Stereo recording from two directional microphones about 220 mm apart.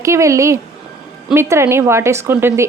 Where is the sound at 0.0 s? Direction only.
15° right (ahead or behind).